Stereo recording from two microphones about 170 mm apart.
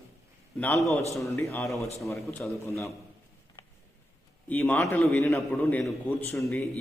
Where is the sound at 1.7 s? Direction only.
Centre (ahead or behind).